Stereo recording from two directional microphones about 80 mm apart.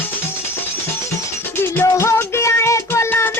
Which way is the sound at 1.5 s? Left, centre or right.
Left.